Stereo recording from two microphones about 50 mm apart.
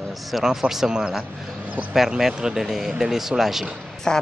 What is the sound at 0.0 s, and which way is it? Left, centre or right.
Speech, centre.